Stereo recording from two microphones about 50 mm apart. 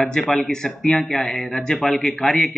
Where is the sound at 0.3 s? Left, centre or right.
Centre.